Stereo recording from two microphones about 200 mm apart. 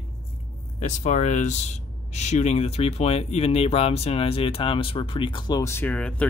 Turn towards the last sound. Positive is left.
turn(degrees=5)  # may be behind; listen again after turning